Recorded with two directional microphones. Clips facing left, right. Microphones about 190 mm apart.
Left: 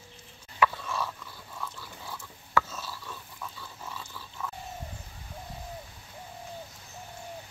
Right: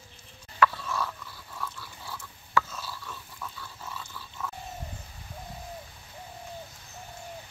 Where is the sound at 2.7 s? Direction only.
20° left (ahead or behind).